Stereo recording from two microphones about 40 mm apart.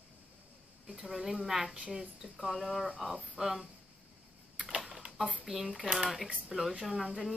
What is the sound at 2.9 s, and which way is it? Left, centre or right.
Speech, centre.